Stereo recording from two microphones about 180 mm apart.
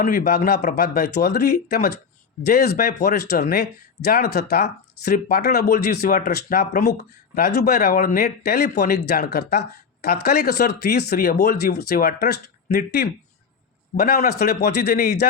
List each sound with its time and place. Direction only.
0.0 s speech: 50° left (ahead or behind)